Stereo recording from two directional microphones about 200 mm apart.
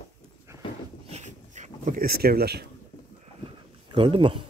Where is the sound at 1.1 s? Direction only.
35° right (ahead or behind).